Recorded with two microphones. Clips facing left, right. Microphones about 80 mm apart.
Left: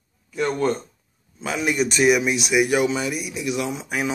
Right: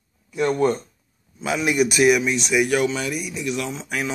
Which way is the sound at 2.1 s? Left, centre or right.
Centre.